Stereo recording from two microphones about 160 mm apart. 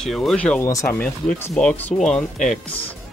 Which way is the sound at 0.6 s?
20° left (ahead or behind).